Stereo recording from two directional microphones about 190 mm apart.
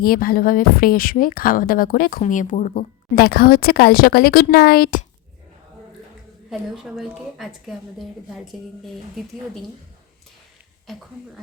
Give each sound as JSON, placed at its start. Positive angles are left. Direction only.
{"t": 0.0, "sound": "speech", "side_deg": 50}
{"t": 6.5, "sound": "a woman's voice", "side_deg": 0}